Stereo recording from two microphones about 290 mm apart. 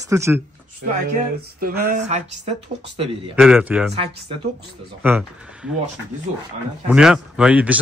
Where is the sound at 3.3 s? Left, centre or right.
Centre.